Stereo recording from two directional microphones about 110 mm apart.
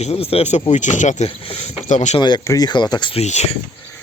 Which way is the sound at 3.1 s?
85° left.